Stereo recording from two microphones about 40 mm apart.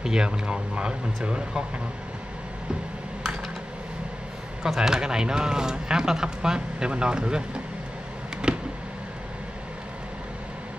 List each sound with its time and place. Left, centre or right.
0.0 s speech: centre
0.5 s speech: right
4.7 s speech: centre
8.5 s a sound: right